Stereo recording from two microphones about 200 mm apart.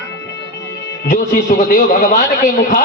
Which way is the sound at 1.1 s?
40° left (ahead or behind).